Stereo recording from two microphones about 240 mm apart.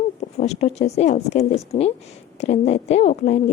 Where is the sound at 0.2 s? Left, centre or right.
Left.